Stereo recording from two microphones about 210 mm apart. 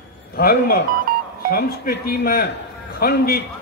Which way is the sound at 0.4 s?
45° left (ahead or behind).